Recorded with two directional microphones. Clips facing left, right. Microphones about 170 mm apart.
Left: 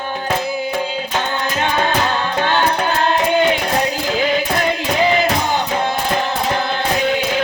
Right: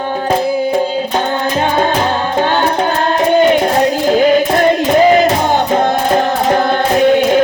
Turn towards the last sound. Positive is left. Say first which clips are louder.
# right 8 dB
turn(degrees=-45)  # may be behind; listen again after turning